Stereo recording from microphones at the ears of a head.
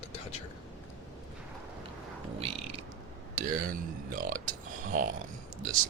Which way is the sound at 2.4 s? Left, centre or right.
Right.